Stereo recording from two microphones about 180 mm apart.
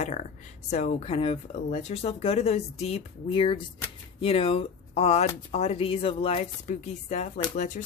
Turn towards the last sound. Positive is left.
turn(degrees=40)  # may be behind; listen again after turning